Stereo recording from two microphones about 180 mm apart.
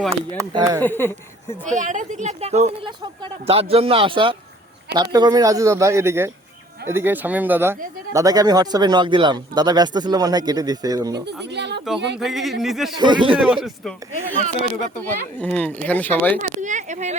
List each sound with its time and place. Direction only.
0.3 s speech: 20° right (ahead or behind)
0.8 s speech: 10° left (ahead or behind)
1.6 s speech: 45° right (ahead or behind); by 11.2 s 20° right (ahead or behind)
11.5 s speech: 70° right (ahead or behind)
12.2 s speech: centre (ahead or behind)
13.0 s speech: 25° right (ahead or behind)
13.4 s speech: 5° right (ahead or behind)
14.9 s speech: 10° left (ahead or behind)
16.6 s speech: 45° right (ahead or behind)